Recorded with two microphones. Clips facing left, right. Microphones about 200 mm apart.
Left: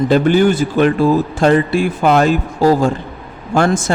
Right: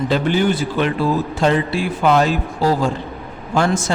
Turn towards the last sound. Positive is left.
turn(degrees=50)  # may be behind; listen again after turning